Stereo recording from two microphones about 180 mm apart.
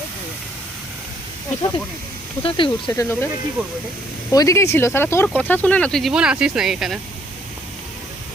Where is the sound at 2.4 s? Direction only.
30° left (ahead or behind).